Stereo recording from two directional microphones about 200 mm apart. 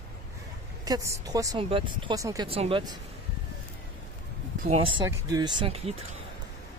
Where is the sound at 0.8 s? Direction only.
15° right (ahead or behind).